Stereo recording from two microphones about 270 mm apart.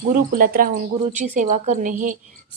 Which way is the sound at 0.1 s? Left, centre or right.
Right.